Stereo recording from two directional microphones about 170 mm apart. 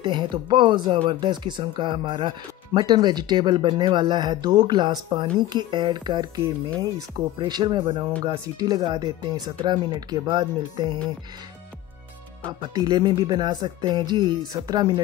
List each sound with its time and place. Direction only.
0.0 s speech: 30° right (ahead or behind)
12.4 s speech: 25° right (ahead or behind)